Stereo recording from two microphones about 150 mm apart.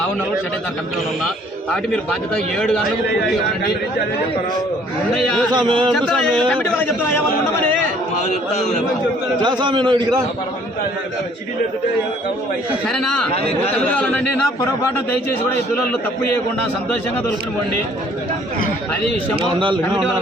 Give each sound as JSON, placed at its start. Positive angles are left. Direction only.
{"t": 2.6, "sound": "speech", "side_deg": 5}
{"t": 5.1, "sound": "speech", "side_deg": 5}
{"t": 5.5, "sound": "a man's voice", "side_deg": -30}
{"t": 5.9, "sound": "a man's voice", "side_deg": 5}
{"t": 9.4, "sound": "a man's voice", "side_deg": -30}
{"t": 12.9, "sound": "a man's voice", "side_deg": 5}
{"t": 19.4, "sound": "a man's voice", "side_deg": -35}